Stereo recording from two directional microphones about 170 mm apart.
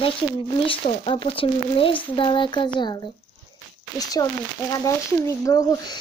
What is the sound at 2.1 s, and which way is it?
Speech, 30° left (ahead or behind).